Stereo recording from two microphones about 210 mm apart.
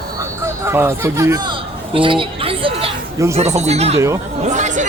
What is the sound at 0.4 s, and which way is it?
Speech, 10° right (ahead or behind).